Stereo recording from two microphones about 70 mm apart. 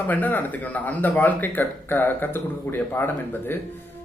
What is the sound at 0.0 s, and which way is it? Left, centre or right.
Speech, left.